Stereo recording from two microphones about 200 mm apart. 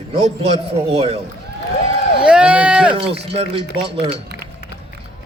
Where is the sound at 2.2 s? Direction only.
5° right (ahead or behind).